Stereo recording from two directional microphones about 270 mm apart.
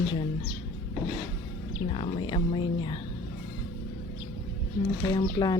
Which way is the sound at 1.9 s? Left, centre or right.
Centre.